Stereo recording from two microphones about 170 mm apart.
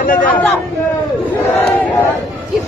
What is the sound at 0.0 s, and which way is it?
Speech, 55° left (ahead or behind).